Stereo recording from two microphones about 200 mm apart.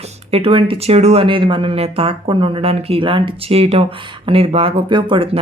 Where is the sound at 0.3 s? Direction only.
30° right (ahead or behind).